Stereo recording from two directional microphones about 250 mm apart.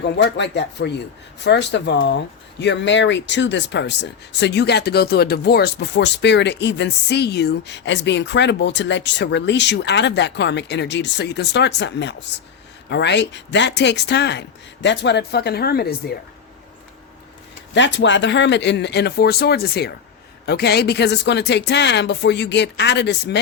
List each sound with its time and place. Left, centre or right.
0.0 s speech: left
17.7 s speech: left